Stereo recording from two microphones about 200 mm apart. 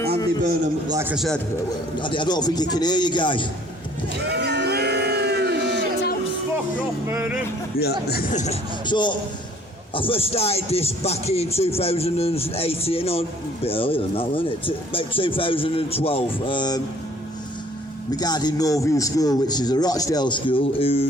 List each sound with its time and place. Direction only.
0.9 s speech: 15° right (ahead or behind)
1.1 s speech: centre (ahead or behind)
2.0 s speech: 25° left (ahead or behind)
4.3 s a sound: 60° right (ahead or behind)
7.1 s speech: 10° right (ahead or behind)
7.8 s speech: 55° left (ahead or behind)
8.3 s speech: 35° left (ahead or behind)
8.9 s speech: 20° left (ahead or behind)
18.2 s speech: 20° left (ahead or behind)